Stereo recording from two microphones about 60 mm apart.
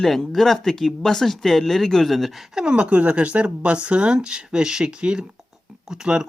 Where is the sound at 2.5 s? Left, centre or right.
Centre.